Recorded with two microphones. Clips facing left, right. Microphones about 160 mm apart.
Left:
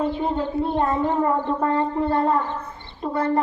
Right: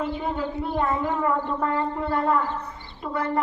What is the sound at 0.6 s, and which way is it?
A woman's voice, 25° left (ahead or behind).